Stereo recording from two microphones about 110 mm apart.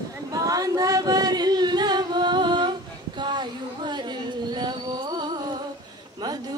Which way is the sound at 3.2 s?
45° right (ahead or behind).